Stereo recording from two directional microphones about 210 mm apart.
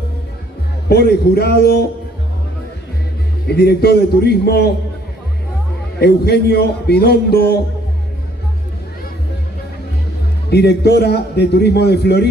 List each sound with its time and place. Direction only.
0.8 s a man's voice: 50° left (ahead or behind)
3.4 s a man's voice: 50° left (ahead or behind)
5.9 s a man's voice: 50° left (ahead or behind)
10.5 s a man's voice: 50° left (ahead or behind)